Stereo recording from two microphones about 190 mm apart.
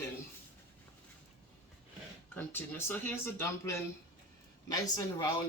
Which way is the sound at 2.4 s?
10° left (ahead or behind).